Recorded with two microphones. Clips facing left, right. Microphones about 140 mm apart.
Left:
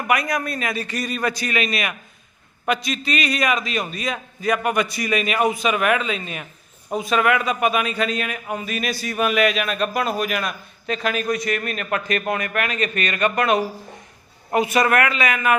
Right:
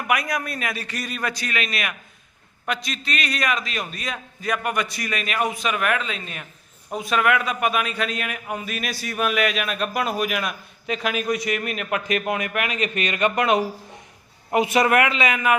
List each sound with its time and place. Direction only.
0.1 s a man's voice: 5° right (ahead or behind); by 15.5 s 20° right (ahead or behind)